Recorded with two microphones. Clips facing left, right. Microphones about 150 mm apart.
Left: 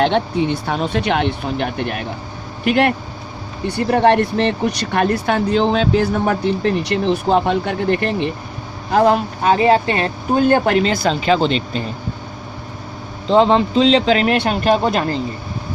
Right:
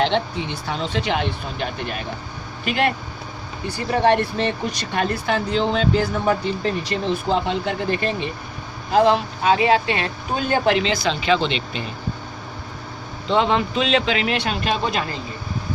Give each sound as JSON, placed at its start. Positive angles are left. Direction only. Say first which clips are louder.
{"t": 0.0, "sound": "speech", "louder": "left 5 dB", "side_deg": 55}
{"t": 8.9, "sound": "speech", "louder": "left 2 dB", "side_deg": 45}
{"t": 13.2, "sound": "speech", "louder": "left 6 dB", "side_deg": 35}